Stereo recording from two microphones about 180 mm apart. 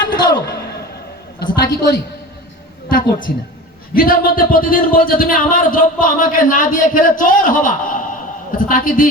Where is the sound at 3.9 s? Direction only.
55° left (ahead or behind).